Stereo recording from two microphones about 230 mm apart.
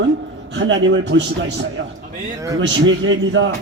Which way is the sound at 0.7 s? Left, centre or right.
Right.